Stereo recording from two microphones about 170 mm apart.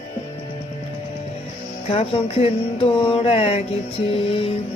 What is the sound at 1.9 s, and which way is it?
Mantra, 35° left (ahead or behind).